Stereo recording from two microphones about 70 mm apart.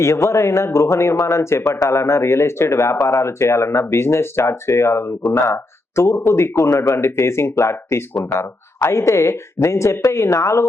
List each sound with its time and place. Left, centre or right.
0.0 s speech: left